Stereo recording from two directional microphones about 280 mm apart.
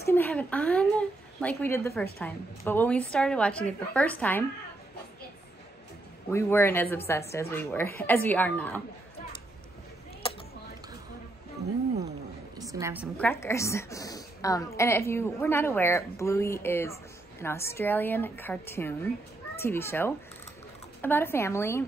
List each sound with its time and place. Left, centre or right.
0.0 s a woman's voice: centre
6.3 s a woman's voice: centre
10.2 s a sound: centre
12.5 s a woman's voice: centre
13.2 s a woman's voice: centre